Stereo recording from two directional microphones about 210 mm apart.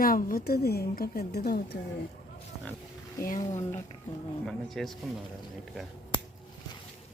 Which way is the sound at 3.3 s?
35° left (ahead or behind).